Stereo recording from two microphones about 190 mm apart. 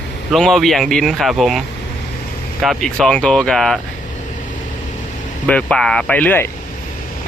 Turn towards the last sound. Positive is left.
turn(degrees=10)  # may be behind; listen again after turning